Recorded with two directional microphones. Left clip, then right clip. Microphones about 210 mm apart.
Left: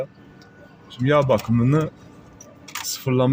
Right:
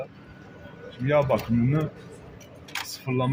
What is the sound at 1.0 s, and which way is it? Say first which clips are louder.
Speech: left 4 dB; 55° left (ahead or behind).